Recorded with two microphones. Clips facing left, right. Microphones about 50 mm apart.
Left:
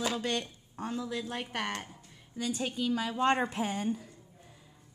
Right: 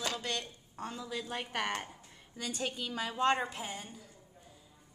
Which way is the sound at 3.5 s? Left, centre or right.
Left.